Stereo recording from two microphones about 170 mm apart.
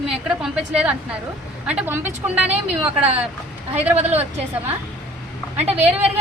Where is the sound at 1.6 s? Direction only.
10° right (ahead or behind).